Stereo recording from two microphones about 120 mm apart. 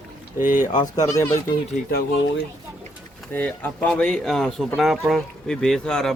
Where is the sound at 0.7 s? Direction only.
30° left (ahead or behind).